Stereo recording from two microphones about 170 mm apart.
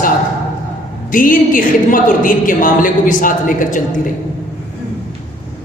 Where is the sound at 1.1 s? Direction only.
55° left (ahead or behind).